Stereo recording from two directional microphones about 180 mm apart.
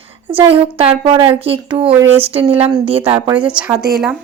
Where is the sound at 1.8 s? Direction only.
10° right (ahead or behind).